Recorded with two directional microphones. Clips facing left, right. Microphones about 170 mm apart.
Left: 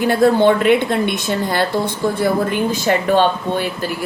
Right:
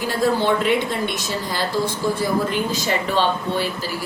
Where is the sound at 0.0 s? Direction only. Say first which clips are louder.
Left 7 dB; 60° left (ahead or behind).